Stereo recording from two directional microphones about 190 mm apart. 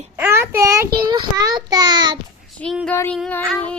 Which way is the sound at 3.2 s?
5° left (ahead or behind).